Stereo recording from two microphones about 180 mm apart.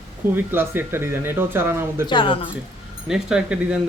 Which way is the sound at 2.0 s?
25° left (ahead or behind).